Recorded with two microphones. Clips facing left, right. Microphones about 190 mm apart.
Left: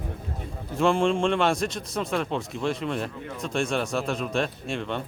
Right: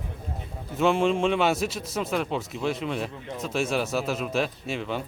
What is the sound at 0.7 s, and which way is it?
Speech, 5° right (ahead or behind).